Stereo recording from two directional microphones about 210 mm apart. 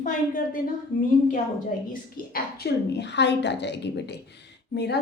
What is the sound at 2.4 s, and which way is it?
A woman's voice, 50° left (ahead or behind).